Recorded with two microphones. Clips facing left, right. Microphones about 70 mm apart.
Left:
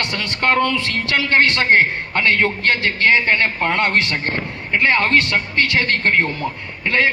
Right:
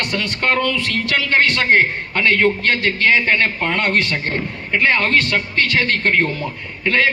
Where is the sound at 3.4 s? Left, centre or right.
Left.